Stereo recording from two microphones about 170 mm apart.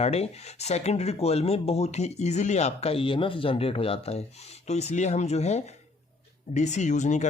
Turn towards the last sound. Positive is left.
turn(degrees=45)  # may be behind; listen again after turning